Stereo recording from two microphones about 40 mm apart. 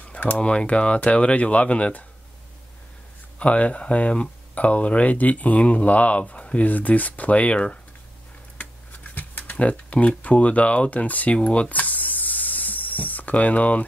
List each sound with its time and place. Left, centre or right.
0.4 s speech: left
3.3 s speech: left
6.7 s speech: left
9.6 s speech: left
11.3 s speech: left
11.7 s spray: left